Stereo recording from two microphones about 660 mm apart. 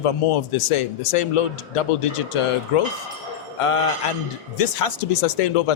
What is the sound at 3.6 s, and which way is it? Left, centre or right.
Speech, left.